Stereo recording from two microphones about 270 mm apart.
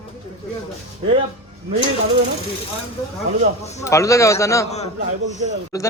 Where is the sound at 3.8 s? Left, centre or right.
Centre.